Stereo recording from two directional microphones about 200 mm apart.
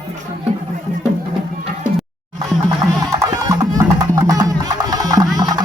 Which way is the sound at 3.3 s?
15° right (ahead or behind).